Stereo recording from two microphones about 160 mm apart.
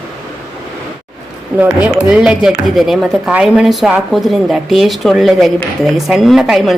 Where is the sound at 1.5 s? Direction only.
10° right (ahead or behind).